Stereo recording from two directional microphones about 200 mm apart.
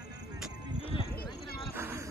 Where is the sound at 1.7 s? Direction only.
10° right (ahead or behind).